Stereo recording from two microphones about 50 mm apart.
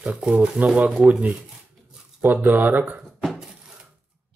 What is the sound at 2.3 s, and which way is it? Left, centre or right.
Speech, right.